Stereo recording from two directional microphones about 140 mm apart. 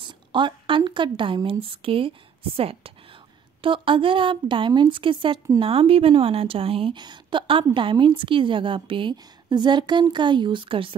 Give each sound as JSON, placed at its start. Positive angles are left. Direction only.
{"t": 0.0, "sound": "a woman's voice", "side_deg": -35}